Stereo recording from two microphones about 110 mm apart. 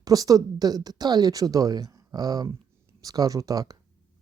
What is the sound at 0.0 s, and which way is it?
Speech, 35° right (ahead or behind).